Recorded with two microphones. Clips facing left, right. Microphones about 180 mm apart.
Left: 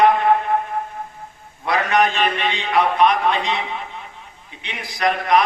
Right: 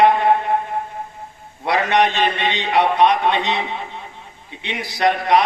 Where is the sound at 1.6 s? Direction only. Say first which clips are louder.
Right 1 dB; 30° right (ahead or behind).